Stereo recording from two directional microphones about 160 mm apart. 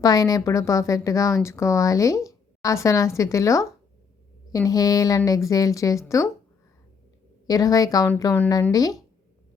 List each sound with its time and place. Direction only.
0.0 s speech: 20° left (ahead or behind)
7.4 s speech: 25° left (ahead or behind)